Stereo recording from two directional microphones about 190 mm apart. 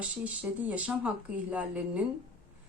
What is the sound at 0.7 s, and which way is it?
Speech, 5° right (ahead or behind).